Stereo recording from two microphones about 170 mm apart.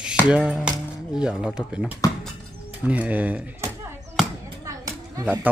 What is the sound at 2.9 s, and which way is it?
Chop, 10° right (ahead or behind).